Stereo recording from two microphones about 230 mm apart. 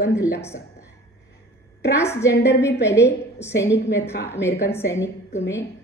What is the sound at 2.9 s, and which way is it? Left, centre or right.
A woman's voice, centre.